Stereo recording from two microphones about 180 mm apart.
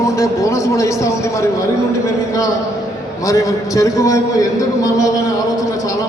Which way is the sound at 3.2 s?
20° left (ahead or behind).